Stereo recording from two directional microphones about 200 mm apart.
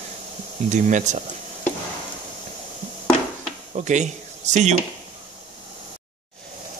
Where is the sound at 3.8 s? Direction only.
35° right (ahead or behind).